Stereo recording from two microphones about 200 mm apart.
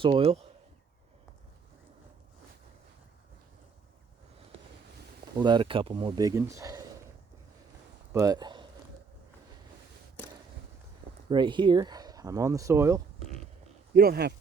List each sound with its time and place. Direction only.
0.0 s speech: 25° right (ahead or behind)
5.4 s speech: 20° right (ahead or behind)
8.1 s speech: 20° right (ahead or behind)
11.3 s speech: 25° right (ahead or behind)
13.9 s speech: 50° right (ahead or behind)